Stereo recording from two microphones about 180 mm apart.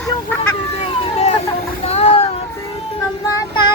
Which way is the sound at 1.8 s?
35° left (ahead or behind).